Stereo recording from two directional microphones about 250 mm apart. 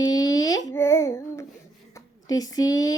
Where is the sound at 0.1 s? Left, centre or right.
Centre.